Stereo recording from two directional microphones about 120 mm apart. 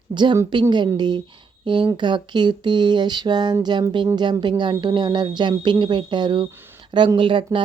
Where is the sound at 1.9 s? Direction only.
40° right (ahead or behind).